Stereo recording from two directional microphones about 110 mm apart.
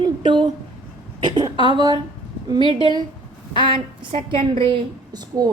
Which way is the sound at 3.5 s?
50° right (ahead or behind).